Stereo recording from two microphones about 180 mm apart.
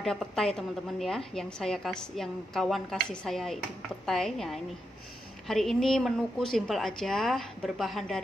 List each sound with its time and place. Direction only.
0.0 s a woman's voice: centre (ahead or behind)